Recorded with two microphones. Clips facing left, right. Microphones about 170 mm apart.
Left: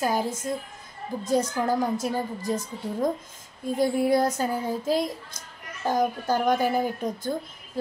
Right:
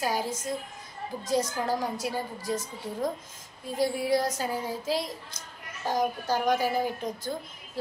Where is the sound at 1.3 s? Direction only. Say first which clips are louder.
Left 4 dB; 50° left (ahead or behind).